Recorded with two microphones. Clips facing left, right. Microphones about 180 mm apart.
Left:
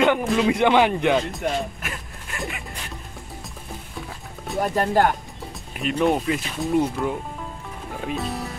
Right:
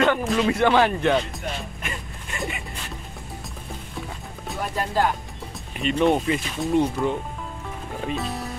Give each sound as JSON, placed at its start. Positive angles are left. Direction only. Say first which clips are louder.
{"t": 0.0, "sound": "speech", "louder": "left 1 dB", "side_deg": 15}
{"t": 1.3, "sound": "music", "louder": "left 7 dB", "side_deg": 0}
{"t": 4.7, "sound": "speech", "louder": "left 3 dB", "side_deg": 50}
{"t": 5.8, "sound": "speech", "louder": "right 1 dB", "side_deg": 0}